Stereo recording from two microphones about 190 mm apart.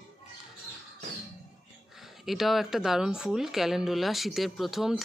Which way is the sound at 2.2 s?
Centre (ahead or behind).